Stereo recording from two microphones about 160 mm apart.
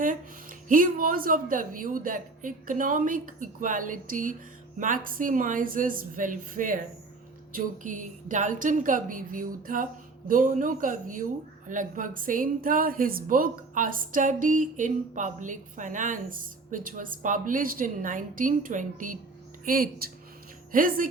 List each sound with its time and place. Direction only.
0.7 s a woman's voice: 60° right (ahead or behind)